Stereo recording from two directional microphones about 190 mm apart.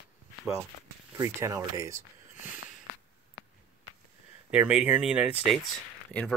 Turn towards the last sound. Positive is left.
turn(degrees=5)  # may be behind; listen again after turning